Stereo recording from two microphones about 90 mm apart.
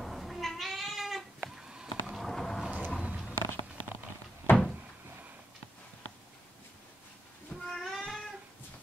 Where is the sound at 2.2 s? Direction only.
5° left (ahead or behind).